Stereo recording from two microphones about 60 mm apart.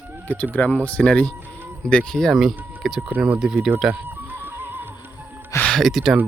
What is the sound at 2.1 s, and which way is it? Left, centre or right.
Speech, centre.